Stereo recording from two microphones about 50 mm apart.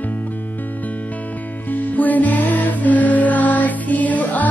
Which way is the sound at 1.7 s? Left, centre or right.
Left.